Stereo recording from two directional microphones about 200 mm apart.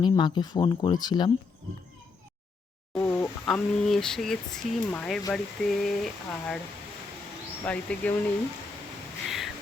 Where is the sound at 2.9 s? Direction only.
10° left (ahead or behind).